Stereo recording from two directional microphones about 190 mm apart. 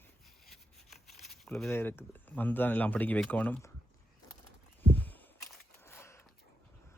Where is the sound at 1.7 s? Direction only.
10° left (ahead or behind).